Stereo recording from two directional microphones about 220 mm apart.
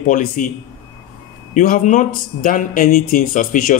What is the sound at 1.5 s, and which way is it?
Speech, 35° left (ahead or behind).